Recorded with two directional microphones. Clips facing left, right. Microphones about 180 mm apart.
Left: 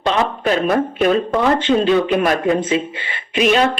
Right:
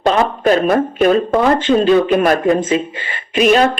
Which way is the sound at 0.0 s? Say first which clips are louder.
Right 4 dB; 45° right (ahead or behind).